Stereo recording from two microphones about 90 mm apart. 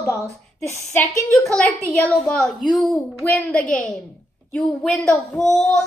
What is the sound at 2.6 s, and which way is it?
A woman's voice, 5° left (ahead or behind).